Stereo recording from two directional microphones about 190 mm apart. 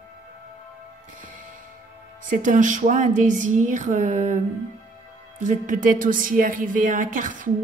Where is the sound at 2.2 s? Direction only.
40° right (ahead or behind).